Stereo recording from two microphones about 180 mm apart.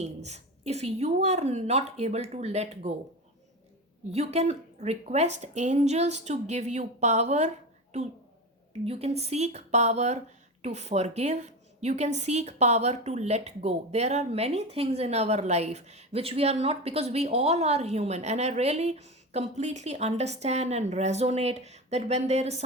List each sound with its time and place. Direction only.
0.0 s a woman's voice: 40° right (ahead or behind)
4.1 s a woman's voice: 35° right (ahead or behind)
8.8 s a woman's voice: 35° right (ahead or behind)